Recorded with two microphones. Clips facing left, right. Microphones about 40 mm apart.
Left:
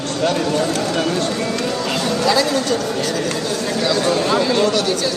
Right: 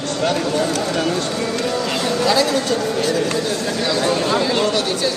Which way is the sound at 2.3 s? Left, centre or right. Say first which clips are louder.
Even; centre.